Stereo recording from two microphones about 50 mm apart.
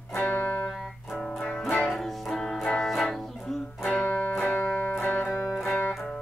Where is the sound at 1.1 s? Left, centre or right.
Left.